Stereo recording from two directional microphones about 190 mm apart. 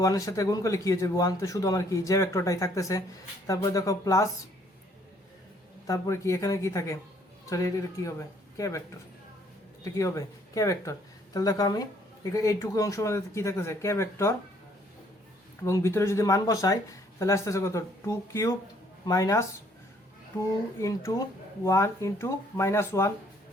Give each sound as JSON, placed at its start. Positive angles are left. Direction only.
{"t": 0.0, "sound": "speech", "side_deg": 15}
{"t": 5.9, "sound": "speech", "side_deg": 15}
{"t": 9.8, "sound": "speech", "side_deg": 15}
{"t": 15.6, "sound": "speech", "side_deg": 15}
{"t": 20.7, "sound": "speech", "side_deg": 20}